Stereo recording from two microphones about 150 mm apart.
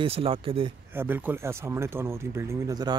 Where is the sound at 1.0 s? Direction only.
15° right (ahead or behind).